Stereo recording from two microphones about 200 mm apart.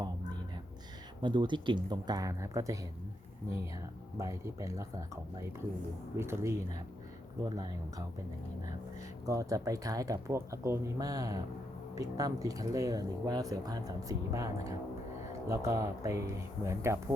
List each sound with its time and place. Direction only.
1.2 s speech: 25° right (ahead or behind)
4.2 s speech: 15° right (ahead or behind)
9.2 s speech: 15° right (ahead or behind)